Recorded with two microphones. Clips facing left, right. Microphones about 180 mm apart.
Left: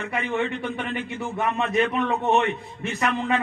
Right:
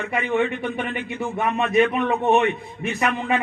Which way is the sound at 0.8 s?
15° right (ahead or behind).